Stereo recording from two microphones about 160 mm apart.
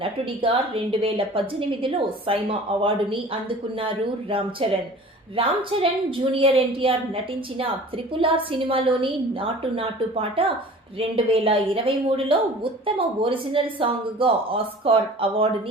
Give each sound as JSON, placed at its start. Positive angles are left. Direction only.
{"t": 0.0, "sound": "a woman's voice", "side_deg": -35}